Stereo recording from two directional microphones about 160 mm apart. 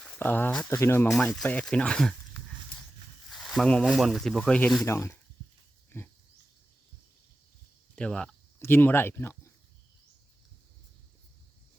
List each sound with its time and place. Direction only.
0.2 s speech: 10° left (ahead or behind)
1.1 s speech: centre (ahead or behind)
4.9 s speech: 15° left (ahead or behind)
5.9 s pig: 15° left (ahead or behind)
7.9 s cricket: 5° left (ahead or behind)
8.6 s speech: 15° left (ahead or behind)